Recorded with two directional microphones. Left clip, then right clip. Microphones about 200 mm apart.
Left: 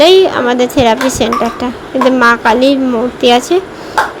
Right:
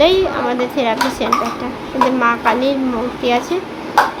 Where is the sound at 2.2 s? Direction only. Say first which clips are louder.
Left 7 dB; 35° left (ahead or behind).